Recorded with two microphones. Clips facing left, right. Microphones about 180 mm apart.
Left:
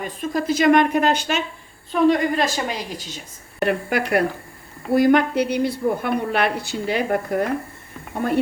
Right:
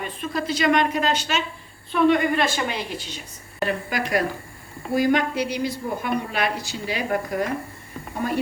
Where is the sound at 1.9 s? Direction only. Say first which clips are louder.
Left 1 dB; 35° left (ahead or behind).